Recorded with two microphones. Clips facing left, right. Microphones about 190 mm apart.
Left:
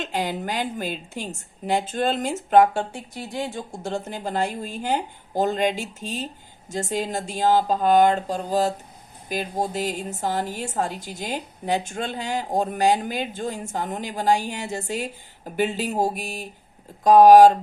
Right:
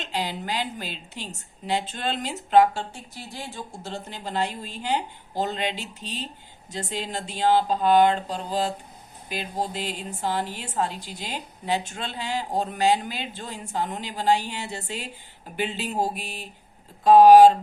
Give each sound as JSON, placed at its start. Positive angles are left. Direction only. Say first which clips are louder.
{"t": 0.0, "sound": "a woman's voice", "louder": "left 4 dB", "side_deg": 50}